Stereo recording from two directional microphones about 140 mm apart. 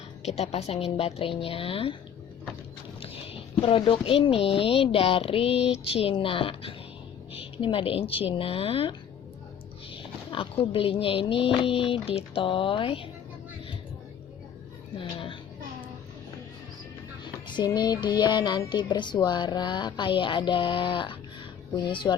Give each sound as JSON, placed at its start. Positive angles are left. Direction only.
{"t": 0.3, "sound": "a woman's voice", "side_deg": 50}
{"t": 3.0, "sound": "a sound", "side_deg": 40}
{"t": 3.6, "sound": "music", "side_deg": 40}
{"t": 14.9, "sound": "a woman's voice", "side_deg": 35}
{"t": 17.5, "sound": "music", "side_deg": 30}